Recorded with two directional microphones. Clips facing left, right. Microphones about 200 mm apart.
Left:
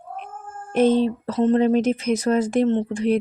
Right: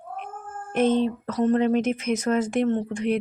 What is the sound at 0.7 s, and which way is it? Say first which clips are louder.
Speech: left 3 dB; 35° left (ahead or behind).